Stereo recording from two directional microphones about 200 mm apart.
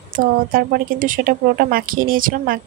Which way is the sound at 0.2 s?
45° right (ahead or behind).